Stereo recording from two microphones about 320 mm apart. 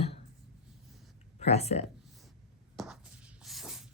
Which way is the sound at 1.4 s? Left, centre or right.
Centre.